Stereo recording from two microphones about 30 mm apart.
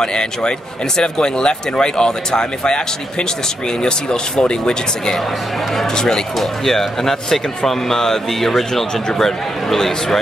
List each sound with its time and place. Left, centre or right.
0.0 s speech: left
6.3 s speech: centre
8.9 s speech: centre